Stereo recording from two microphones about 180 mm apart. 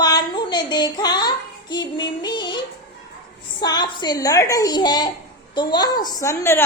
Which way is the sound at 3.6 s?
25° left (ahead or behind).